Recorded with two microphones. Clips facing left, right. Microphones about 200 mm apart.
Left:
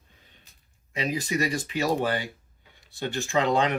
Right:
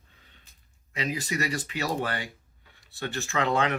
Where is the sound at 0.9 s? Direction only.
10° left (ahead or behind).